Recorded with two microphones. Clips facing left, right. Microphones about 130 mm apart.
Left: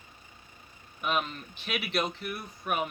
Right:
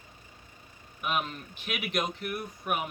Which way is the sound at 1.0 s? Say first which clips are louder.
Left 1 dB; 10° right (ahead or behind).